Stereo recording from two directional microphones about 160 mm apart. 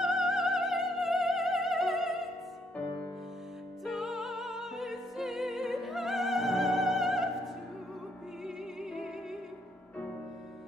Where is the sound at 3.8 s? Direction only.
Centre (ahead or behind).